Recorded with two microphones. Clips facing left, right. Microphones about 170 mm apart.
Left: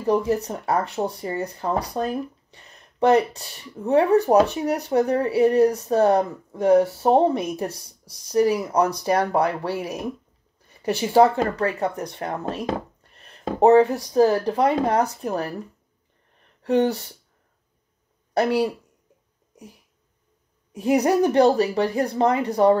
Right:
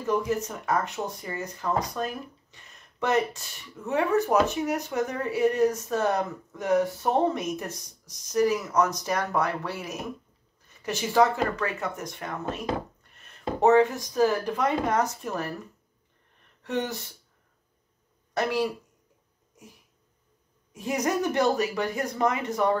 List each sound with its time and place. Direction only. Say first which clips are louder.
0.0 s speech: left 5 dB; 35° left (ahead or behind)
11.0 s speech: left 5 dB; 30° left (ahead or behind)
16.6 s speech: left 10 dB; 35° left (ahead or behind)
20.8 s speech: left 8 dB; 35° left (ahead or behind)